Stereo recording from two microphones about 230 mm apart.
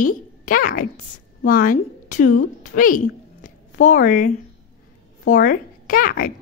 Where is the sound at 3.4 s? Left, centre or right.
Left.